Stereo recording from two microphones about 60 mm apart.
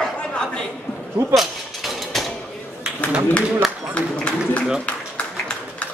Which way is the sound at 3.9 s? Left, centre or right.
Centre.